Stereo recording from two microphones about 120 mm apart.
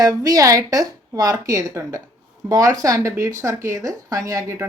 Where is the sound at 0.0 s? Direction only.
30° right (ahead or behind).